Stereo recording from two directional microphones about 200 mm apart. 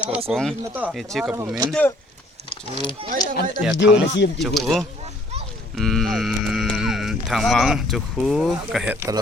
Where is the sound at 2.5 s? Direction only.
25° left (ahead or behind).